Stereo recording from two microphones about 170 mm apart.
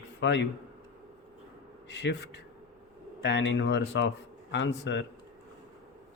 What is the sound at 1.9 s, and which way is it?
Speech, 90° left.